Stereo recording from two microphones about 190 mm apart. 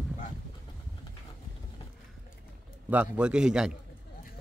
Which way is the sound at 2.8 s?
5° right (ahead or behind).